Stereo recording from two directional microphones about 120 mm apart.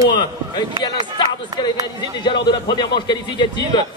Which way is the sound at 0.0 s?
40° left (ahead or behind).